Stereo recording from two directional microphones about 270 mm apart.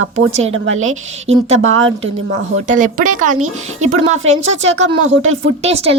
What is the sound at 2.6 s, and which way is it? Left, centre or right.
Speech, right.